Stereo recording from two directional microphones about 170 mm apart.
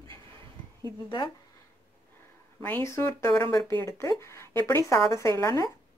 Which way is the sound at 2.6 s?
15° left (ahead or behind).